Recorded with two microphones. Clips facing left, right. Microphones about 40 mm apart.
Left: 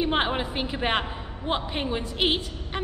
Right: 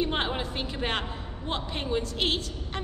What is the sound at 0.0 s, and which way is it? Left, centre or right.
A woman's voice, centre.